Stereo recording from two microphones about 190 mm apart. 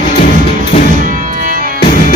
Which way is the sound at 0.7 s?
30° left (ahead or behind).